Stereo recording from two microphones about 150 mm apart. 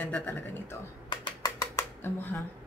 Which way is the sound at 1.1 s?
30° left (ahead or behind).